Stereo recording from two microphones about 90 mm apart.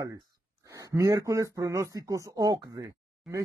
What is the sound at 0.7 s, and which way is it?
Speech, 40° right (ahead or behind).